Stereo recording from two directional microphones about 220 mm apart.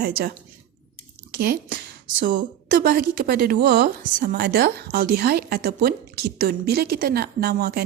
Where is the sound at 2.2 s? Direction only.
40° right (ahead or behind).